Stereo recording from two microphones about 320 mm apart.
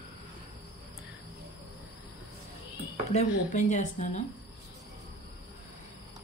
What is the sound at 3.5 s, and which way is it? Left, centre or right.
Speech, left.